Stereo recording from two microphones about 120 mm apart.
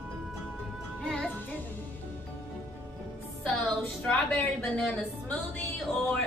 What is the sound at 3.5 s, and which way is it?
A woman's voice, 10° left (ahead or behind).